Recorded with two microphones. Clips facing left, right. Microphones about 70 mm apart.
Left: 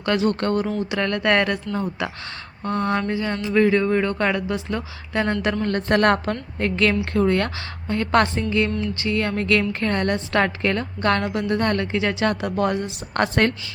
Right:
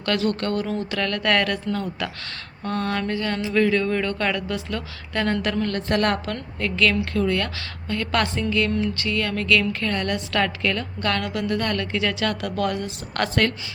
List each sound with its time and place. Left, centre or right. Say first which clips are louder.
0.0 s speech: left 2 dB; left
5.6 s a woman's voice: left 6 dB; left